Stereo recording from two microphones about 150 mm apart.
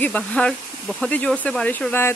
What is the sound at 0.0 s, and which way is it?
Speech, 10° left (ahead or behind).